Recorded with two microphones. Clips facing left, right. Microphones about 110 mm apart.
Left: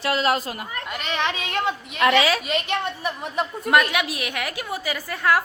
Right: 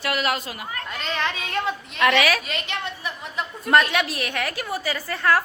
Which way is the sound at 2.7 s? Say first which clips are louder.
Left 5 dB; 50° left (ahead or behind).